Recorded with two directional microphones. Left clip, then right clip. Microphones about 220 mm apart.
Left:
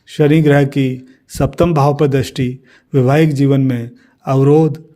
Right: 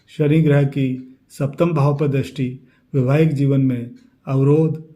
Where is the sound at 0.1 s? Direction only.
45° left (ahead or behind).